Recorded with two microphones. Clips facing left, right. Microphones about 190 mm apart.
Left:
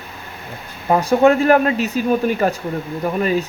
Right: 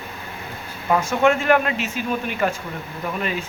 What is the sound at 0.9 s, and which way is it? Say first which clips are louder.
Speech: left 5 dB; 35° left (ahead or behind).